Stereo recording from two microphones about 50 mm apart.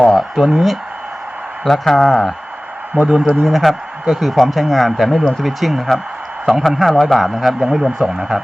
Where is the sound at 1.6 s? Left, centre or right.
Centre.